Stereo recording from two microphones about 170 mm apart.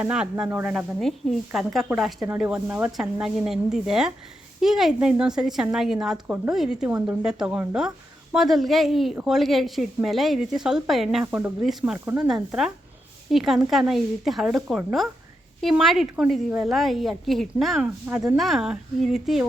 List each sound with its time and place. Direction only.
0.0 s a woman's voice: 5° right (ahead or behind)
11.9 s speech: 20° right (ahead or behind)
13.3 s a woman's voice: centre (ahead or behind)